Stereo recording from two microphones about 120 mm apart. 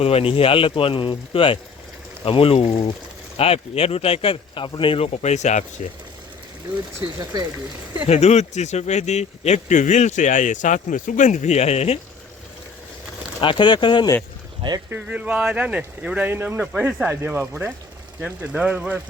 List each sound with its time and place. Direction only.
0.0 s speech: 55° left (ahead or behind); by 5.9 s 80° left
8.0 s speech: 65° left (ahead or behind)
13.4 s speech: 45° left (ahead or behind)
14.8 s speech: 10° right (ahead or behind)